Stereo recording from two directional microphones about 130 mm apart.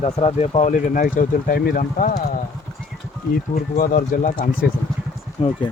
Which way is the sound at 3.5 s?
85° left.